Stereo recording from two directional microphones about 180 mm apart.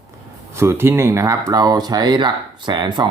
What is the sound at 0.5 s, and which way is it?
Speech, 15° right (ahead or behind).